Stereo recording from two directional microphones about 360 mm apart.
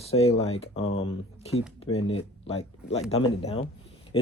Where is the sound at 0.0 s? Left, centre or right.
Centre.